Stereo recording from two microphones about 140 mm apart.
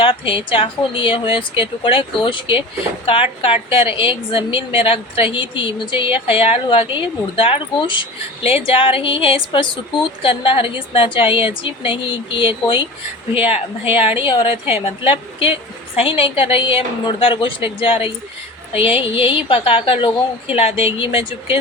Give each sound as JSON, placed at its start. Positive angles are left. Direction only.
{"t": 0.0, "sound": "a woman's voice", "side_deg": 40}